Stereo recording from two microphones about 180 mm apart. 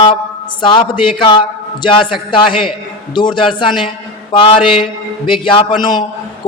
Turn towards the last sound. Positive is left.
turn(degrees=25)  # may be behind; listen again after turning